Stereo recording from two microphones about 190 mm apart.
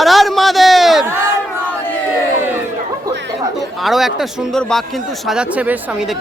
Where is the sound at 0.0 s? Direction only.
Centre (ahead or behind).